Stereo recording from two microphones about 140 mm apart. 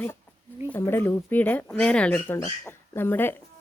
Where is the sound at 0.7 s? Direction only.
15° left (ahead or behind).